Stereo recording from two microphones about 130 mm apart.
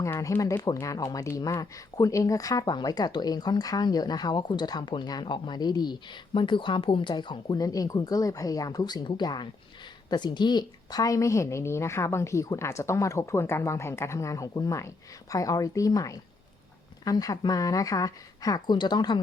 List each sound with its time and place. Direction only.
0.0 s a woman's voice: 25° left (ahead or behind)